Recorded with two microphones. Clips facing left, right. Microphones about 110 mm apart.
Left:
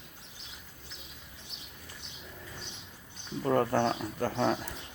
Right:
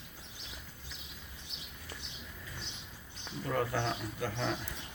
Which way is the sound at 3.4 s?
40° left (ahead or behind).